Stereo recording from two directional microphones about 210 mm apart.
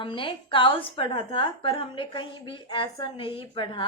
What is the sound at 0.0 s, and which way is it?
A woman's voice, 25° left (ahead or behind).